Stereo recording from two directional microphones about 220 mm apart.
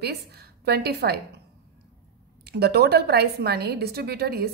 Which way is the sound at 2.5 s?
45° right (ahead or behind).